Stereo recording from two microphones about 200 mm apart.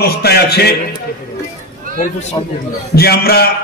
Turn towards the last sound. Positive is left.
turn(degrees=50)  # may be behind; listen again after turning